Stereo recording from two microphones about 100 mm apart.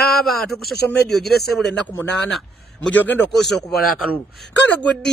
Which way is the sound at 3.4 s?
Centre (ahead or behind).